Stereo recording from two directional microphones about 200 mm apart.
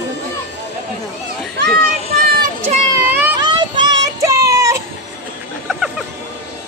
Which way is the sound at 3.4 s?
20° right (ahead or behind).